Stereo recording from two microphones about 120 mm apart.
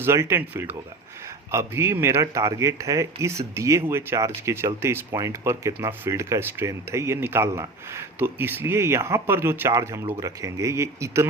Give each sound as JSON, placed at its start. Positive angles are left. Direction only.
{"t": 0.0, "sound": "speech", "side_deg": -20}